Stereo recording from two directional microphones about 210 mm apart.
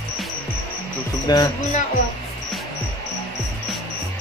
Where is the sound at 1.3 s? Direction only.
20° left (ahead or behind).